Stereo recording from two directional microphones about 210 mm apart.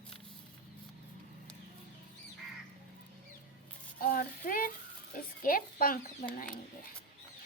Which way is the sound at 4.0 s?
45° left (ahead or behind).